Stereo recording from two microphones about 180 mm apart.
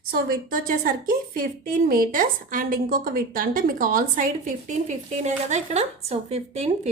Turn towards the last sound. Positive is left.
turn(degrees=-35)  # may be behind; listen again after turning